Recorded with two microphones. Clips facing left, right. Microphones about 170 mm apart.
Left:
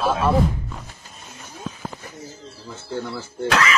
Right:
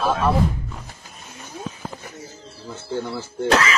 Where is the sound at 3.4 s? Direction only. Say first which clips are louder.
Right 2 dB; 30° right (ahead or behind).